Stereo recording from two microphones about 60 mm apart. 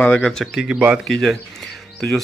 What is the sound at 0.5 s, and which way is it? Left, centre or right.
Speech, centre.